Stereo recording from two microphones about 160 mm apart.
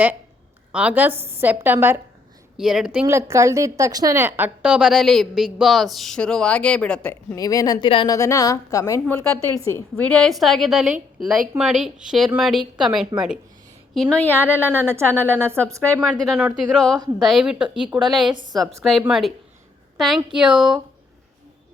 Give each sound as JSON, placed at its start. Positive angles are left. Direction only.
{"t": 0.7, "sound": "a woman's voice", "side_deg": -5}
{"t": 2.6, "sound": "a woman's voice", "side_deg": -5}
{"t": 3.1, "sound": "a woman's voice", "side_deg": -20}
{"t": 7.3, "sound": "a woman's voice", "side_deg": 25}
{"t": 8.1, "sound": "a woman's voice", "side_deg": 20}
{"t": 10.0, "sound": "a woman's voice", "side_deg": 5}
{"t": 14.3, "sound": "a woman's voice", "side_deg": -10}
{"t": 16.2, "sound": "a woman's voice", "side_deg": 0}